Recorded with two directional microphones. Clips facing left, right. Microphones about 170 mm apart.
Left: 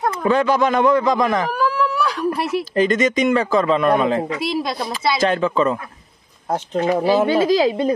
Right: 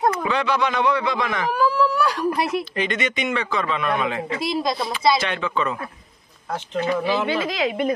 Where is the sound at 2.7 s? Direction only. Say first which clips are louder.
Left 8 dB; 40° left (ahead or behind).